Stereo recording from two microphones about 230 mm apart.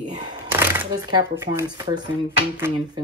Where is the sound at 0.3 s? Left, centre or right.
Centre.